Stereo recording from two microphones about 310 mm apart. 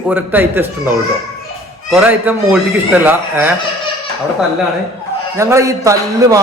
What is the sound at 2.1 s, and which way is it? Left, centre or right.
A man's voice, centre.